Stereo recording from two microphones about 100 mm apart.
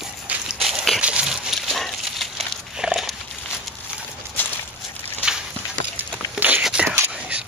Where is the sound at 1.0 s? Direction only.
10° right (ahead or behind).